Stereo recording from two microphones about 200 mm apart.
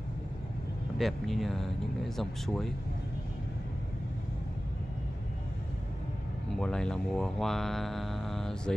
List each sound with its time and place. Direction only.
0.9 s speech: centre (ahead or behind)
6.6 s speech: 5° left (ahead or behind)